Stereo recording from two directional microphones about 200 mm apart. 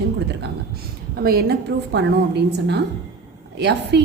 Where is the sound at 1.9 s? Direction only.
60° right (ahead or behind).